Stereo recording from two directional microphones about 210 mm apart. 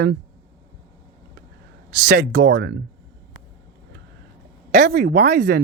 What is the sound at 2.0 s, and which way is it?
Speech, 50° right (ahead or behind).